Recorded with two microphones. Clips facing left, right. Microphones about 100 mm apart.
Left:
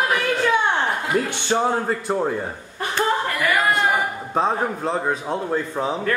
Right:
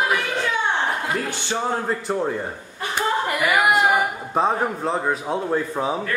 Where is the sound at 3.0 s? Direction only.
15° right (ahead or behind).